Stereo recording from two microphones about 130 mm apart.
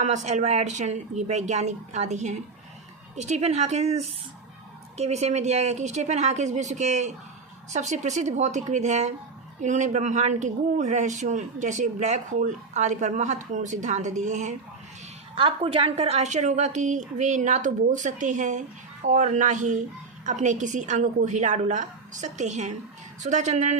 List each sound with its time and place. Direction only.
0.0 s a man's voice: 65° right (ahead or behind)
15.4 s a man's voice: 45° right (ahead or behind); by 23.7 s 70° right (ahead or behind)